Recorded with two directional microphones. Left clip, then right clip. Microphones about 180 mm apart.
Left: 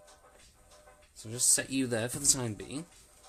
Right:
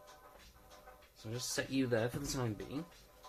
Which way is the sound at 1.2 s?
55° left (ahead or behind).